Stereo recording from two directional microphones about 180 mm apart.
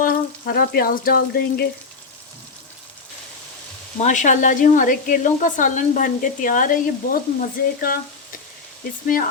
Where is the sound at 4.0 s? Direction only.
45° left (ahead or behind).